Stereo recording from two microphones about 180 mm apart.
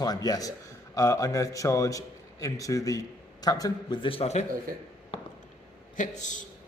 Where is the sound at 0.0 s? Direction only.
20° left (ahead or behind).